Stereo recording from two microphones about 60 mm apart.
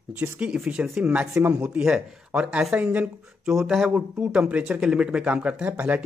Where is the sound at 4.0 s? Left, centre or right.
Right.